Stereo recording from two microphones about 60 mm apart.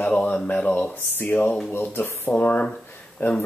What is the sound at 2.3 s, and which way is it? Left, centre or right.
Speech, left.